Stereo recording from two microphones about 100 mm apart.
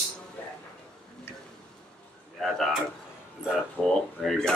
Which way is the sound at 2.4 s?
Centre (ahead or behind).